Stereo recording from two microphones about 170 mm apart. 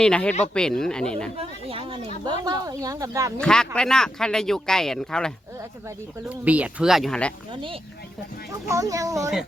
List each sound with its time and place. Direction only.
0.0 s speech: 5° left (ahead or behind)
1.4 s speech: 35° right (ahead or behind)
2.2 s speech: 20° right (ahead or behind)
3.4 s speech: 5° left (ahead or behind)
6.2 s speech: 10° right (ahead or behind)
7.5 s speech: 30° right (ahead or behind)
8.6 s speech: 20° right (ahead or behind)